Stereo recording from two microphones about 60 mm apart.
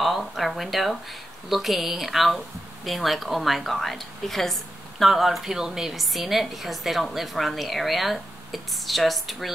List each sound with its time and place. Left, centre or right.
0.0 s speech: centre